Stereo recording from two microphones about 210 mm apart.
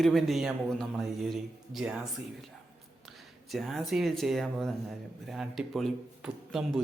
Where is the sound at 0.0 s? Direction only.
Centre (ahead or behind).